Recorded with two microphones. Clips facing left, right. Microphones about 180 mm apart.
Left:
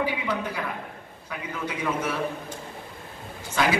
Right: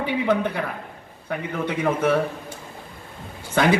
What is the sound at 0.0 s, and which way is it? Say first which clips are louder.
A man's voice: right 6 dB; 60° right (ahead or behind).